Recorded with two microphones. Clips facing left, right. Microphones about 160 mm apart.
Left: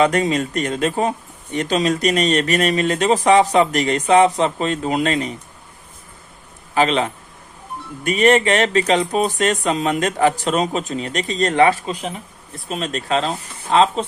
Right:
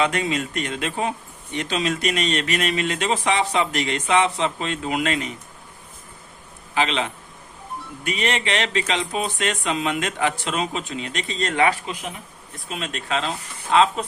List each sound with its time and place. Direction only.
0.0 s speech: 40° left (ahead or behind)
6.7 s speech: 40° left (ahead or behind)